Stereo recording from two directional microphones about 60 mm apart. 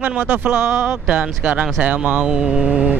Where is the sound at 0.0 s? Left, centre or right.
Right.